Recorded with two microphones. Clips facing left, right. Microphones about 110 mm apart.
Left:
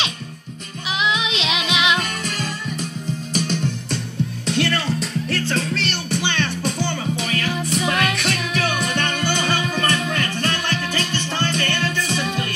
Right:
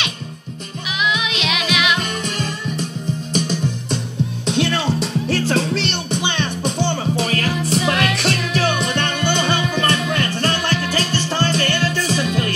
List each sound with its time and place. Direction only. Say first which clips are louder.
1.0 s music: right 1 dB; 30° left (ahead or behind)
2.0 s music: right 2 dB; 25° right (ahead or behind)
4.5 s music: right 3 dB; 20° right (ahead or behind)